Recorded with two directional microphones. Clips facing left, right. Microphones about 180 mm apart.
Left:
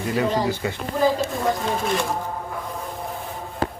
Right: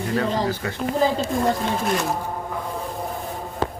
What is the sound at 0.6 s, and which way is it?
Speech, 15° left (ahead or behind).